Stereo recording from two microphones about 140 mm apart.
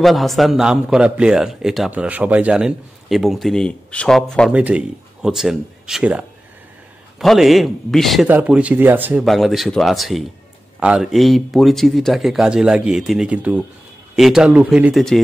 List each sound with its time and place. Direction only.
0.0 s speech: centre (ahead or behind)
4.5 s speech: 10° right (ahead or behind)
8.3 s speech: 10° right (ahead or behind)
9.2 s speech: centre (ahead or behind)